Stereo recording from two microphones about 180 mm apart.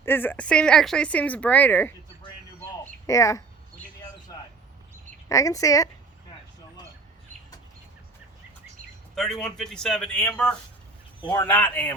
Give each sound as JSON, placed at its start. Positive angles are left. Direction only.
{"t": 0.0, "sound": "speech", "side_deg": 10}
{"t": 3.1, "sound": "a sound", "side_deg": 15}
{"t": 5.3, "sound": "speech", "side_deg": 20}
{"t": 9.1, "sound": "a man's voice", "side_deg": 5}
{"t": 11.2, "sound": "a man's voice", "side_deg": 25}
{"t": 11.4, "sound": "speech", "side_deg": 10}